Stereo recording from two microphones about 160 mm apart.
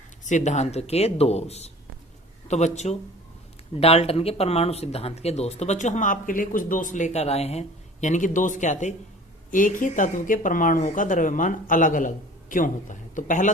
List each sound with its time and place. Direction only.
0.3 s speech: 50° left (ahead or behind)
8.0 s a woman's voice: 50° left (ahead or behind)